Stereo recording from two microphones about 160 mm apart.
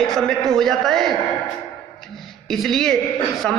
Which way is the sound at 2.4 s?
Centre (ahead or behind).